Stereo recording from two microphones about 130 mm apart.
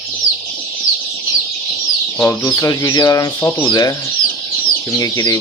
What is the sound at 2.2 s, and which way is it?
Speech, 20° left (ahead or behind).